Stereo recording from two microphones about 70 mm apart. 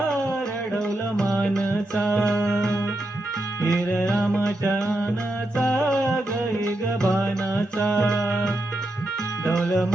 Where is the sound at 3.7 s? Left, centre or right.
Centre.